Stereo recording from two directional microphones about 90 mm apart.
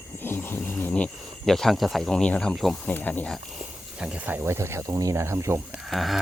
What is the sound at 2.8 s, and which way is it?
Speech, 20° left (ahead or behind).